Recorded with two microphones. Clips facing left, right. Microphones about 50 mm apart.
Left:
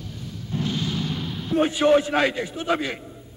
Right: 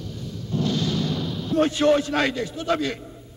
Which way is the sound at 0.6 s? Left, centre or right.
Centre.